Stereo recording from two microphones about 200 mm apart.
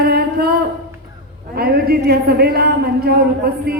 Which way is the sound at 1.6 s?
50° right (ahead or behind).